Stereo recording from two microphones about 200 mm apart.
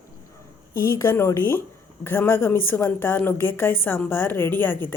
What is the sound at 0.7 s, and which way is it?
A woman's voice, 15° left (ahead or behind).